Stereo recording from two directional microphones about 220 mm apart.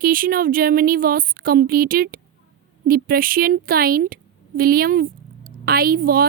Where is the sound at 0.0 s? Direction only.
40° right (ahead or behind).